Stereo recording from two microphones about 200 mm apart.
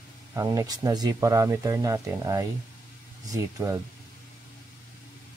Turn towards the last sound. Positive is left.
turn(degrees=-15)  # may be behind; listen again after turning